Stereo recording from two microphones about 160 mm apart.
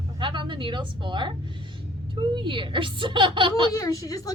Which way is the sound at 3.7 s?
20° left (ahead or behind).